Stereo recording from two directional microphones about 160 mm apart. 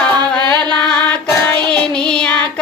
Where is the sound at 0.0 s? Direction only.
5° left (ahead or behind).